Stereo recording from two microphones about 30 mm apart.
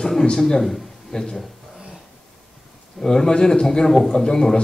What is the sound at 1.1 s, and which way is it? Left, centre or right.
Speech, left.